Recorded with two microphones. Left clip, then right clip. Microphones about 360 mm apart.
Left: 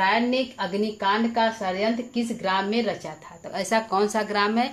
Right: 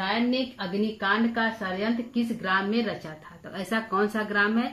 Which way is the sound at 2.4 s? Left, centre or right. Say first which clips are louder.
Left 2 dB; centre.